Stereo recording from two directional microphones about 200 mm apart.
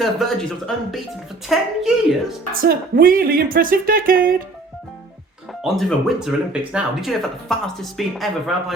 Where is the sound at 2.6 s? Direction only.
45° right (ahead or behind).